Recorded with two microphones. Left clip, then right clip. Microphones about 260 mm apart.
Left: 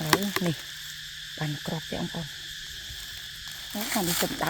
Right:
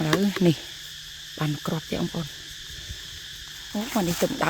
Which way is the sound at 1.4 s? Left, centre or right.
Right.